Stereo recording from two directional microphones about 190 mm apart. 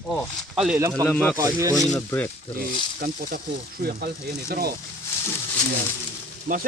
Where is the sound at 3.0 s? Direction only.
45° right (ahead or behind).